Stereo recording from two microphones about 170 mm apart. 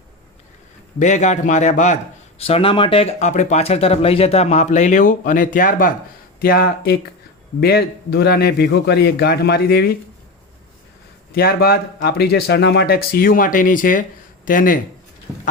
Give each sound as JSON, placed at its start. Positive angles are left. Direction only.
{"t": 0.9, "sound": "a man's voice", "side_deg": 45}
{"t": 2.4, "sound": "a man's voice", "side_deg": 35}
{"t": 11.3, "sound": "a man's voice", "side_deg": 60}
{"t": 15.3, "sound": "speech", "side_deg": 0}